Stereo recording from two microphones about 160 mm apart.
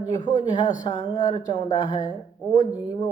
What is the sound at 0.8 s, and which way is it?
Speech, 25° left (ahead or behind).